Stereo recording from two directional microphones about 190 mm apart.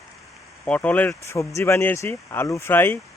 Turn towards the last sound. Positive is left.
turn(degrees=10)  # may be behind; listen again after turning